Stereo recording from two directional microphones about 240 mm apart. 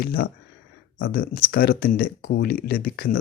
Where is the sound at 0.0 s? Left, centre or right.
Left.